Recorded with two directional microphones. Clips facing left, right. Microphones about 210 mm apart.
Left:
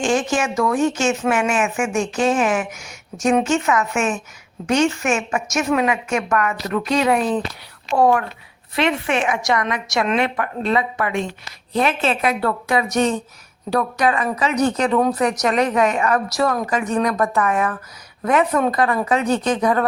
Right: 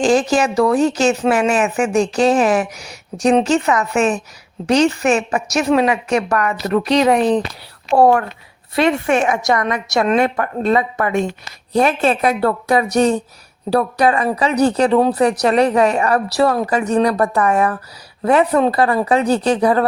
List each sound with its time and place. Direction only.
0.0 s a woman's voice: 35° right (ahead or behind)